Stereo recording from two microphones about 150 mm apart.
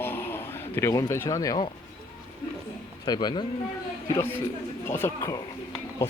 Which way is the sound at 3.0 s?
30° left (ahead or behind).